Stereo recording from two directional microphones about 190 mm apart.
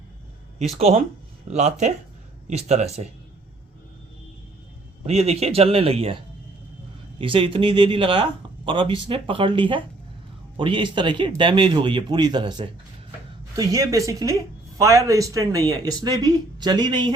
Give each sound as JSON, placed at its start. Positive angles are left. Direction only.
{"t": 0.6, "sound": "speech", "side_deg": -35}
{"t": 5.0, "sound": "speech", "side_deg": -35}
{"t": 7.2, "sound": "speech", "side_deg": -30}